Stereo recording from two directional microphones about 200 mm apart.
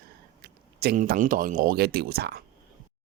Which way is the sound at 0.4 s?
50° right (ahead or behind).